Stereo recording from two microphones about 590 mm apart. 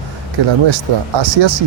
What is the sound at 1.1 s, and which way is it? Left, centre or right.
Speech, right.